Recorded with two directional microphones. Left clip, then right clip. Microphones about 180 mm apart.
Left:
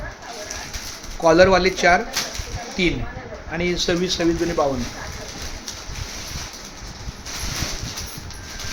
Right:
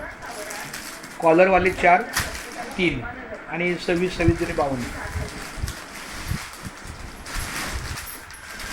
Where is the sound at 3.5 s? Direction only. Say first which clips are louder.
Left 2 dB; 25° left (ahead or behind).